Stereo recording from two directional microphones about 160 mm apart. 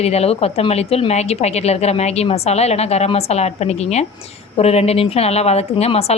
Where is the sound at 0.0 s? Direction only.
40° left (ahead or behind).